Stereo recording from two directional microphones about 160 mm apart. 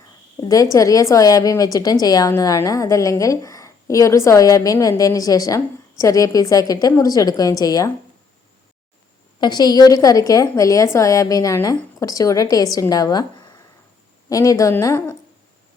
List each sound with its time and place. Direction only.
0.3 s a woman's voice: 20° left (ahead or behind)
9.4 s a woman's voice: 25° left (ahead or behind)